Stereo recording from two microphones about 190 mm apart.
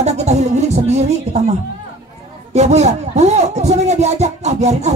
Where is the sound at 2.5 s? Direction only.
35° right (ahead or behind).